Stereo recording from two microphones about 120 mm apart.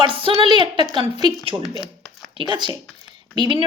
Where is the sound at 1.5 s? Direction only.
25° right (ahead or behind).